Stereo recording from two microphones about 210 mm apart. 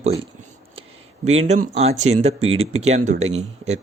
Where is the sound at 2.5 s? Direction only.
80° right.